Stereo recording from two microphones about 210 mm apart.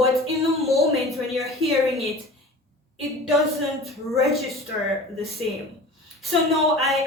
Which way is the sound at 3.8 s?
Centre (ahead or behind).